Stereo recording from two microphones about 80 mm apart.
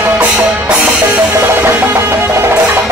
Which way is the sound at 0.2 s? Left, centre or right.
Centre.